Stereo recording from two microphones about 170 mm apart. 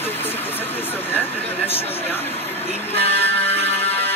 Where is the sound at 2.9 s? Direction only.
10° left (ahead or behind).